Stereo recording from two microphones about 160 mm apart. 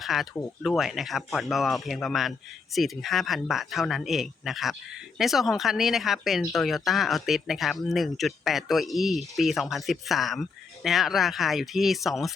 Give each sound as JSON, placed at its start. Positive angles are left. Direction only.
{"t": 0.0, "sound": "speech", "side_deg": 0}